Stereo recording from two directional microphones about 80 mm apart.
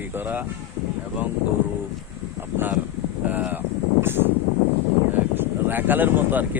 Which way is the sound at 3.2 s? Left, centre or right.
Right.